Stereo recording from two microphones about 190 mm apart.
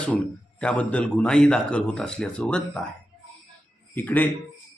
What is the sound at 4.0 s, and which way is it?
Speech, 10° left (ahead or behind).